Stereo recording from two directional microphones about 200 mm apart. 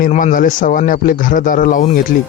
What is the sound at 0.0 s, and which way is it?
A man's voice, 40° left (ahead or behind).